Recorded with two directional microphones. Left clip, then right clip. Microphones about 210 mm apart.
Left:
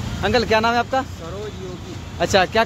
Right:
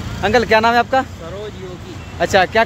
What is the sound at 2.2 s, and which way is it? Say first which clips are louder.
Speech: right 3 dB; 5° right (ahead or behind).